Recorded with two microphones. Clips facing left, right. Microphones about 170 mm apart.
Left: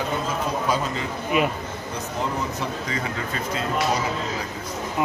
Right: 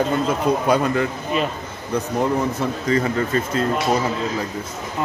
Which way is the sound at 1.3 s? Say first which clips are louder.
Left 1 dB; 15° left (ahead or behind).